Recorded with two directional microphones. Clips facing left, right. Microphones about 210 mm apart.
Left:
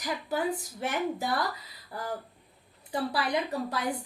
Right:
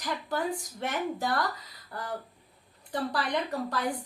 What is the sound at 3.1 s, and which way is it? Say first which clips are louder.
Speech: left 1 dB; 10° left (ahead or behind).